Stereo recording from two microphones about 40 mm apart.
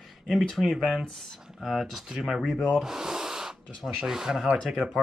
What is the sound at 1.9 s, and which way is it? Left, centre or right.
Speech, centre.